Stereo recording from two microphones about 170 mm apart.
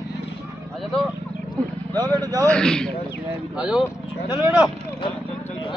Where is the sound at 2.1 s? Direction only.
20° right (ahead or behind).